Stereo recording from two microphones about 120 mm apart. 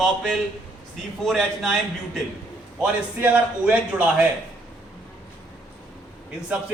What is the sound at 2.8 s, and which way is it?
A man's voice, 10° right (ahead or behind).